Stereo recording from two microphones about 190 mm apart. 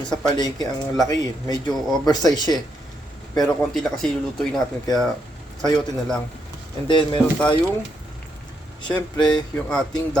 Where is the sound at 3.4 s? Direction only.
Centre (ahead or behind).